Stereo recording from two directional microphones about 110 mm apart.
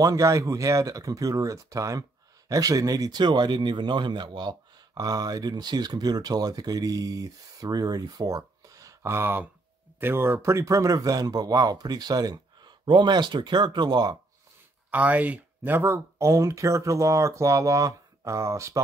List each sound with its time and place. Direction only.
0.0 s speech: 30° right (ahead or behind)
14.9 s speech: 15° right (ahead or behind)